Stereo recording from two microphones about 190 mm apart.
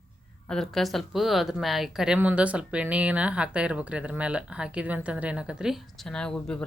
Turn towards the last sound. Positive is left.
turn(degrees=5)  # may be behind; listen again after turning